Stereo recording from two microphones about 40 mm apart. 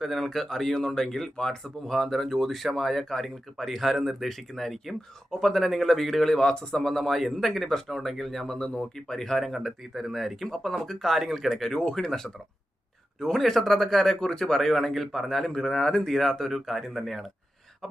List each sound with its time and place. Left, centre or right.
0.0 s speech: centre
1.9 s speech: centre
6.3 s speech: centre
8.5 s speech: left
9.0 s speech: centre